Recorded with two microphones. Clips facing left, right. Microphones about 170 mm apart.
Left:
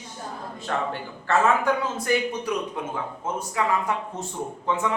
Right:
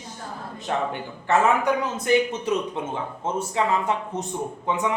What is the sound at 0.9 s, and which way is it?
A man's voice, 20° right (ahead or behind).